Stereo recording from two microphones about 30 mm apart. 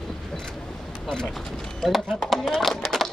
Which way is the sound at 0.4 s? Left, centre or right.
Left.